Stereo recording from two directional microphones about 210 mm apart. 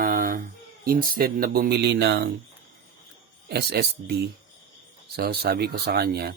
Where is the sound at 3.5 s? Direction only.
50° right (ahead or behind).